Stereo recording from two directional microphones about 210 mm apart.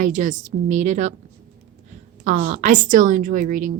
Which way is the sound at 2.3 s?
40° right (ahead or behind).